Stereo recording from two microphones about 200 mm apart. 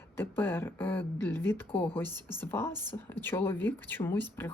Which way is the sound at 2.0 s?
20° right (ahead or behind).